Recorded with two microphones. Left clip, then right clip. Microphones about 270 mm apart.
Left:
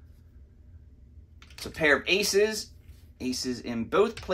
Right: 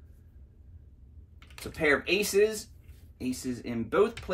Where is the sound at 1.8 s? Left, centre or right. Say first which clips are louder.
Left 2 dB; centre.